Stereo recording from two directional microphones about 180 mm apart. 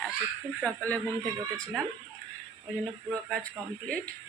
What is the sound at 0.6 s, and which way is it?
Speech, 10° left (ahead or behind).